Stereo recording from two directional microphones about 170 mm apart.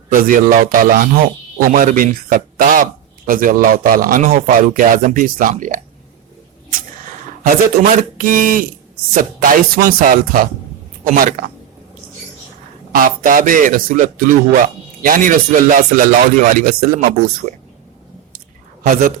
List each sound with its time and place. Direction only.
0.1 s a man's voice: 55° right (ahead or behind)
7.4 s a man's voice: 50° right (ahead or behind)
12.9 s a man's voice: 55° right (ahead or behind)
18.8 s speech: 50° right (ahead or behind)